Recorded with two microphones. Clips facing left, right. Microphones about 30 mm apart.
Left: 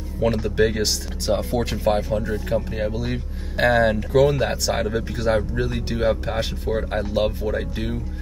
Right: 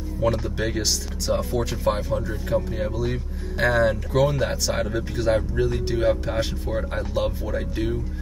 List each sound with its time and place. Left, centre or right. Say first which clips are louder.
0.2 s speech: left 4 dB; centre